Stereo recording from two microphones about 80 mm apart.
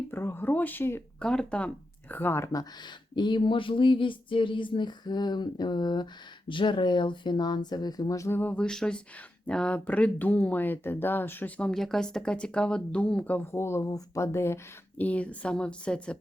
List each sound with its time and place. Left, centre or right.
0.1 s speech: left
1.2 s speech: centre; by 2.6 s left
3.2 s speech: left
6.5 s speech: left
8.2 s speech: left
8.5 s speech: centre
11.7 s speech: centre
13.5 s speech: left
14.9 s speech: centre